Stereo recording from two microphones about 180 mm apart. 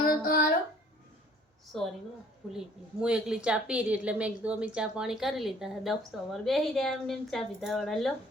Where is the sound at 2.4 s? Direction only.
Centre (ahead or behind).